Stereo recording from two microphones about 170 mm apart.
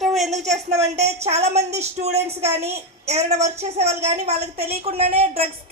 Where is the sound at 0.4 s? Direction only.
40° right (ahead or behind).